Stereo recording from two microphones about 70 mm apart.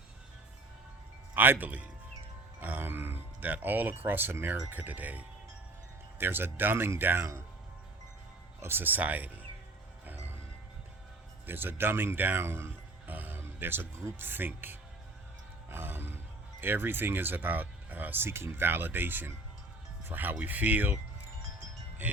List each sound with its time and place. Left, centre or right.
1.3 s speech: right
8.6 s speech: right
11.4 s speech: right
22.0 s wind chime: right